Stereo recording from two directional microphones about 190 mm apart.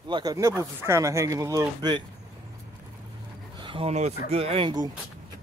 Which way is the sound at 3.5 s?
25° right (ahead or behind).